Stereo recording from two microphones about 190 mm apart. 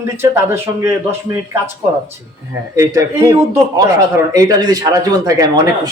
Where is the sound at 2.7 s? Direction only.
15° right (ahead or behind).